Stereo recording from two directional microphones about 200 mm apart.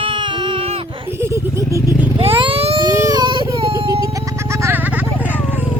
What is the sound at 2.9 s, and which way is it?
Baby cry, 20° right (ahead or behind).